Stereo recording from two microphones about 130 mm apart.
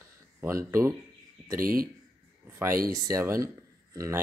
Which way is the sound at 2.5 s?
20° right (ahead or behind).